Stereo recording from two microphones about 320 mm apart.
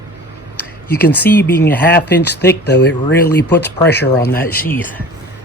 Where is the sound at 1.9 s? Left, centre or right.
Left.